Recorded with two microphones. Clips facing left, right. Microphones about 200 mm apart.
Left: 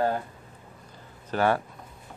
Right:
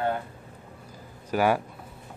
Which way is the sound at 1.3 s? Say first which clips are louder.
Right 1 dB; 10° right (ahead or behind).